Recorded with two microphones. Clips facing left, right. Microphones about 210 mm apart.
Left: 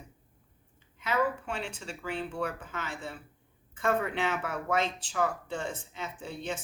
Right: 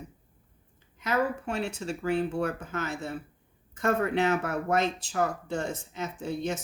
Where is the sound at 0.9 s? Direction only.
40° right (ahead or behind).